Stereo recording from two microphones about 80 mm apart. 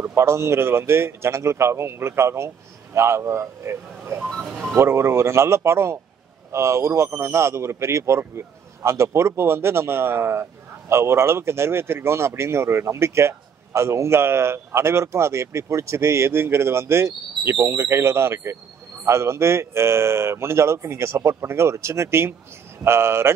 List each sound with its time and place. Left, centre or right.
0.0 s speech: right
4.4 s a sound: centre
4.7 s speech: right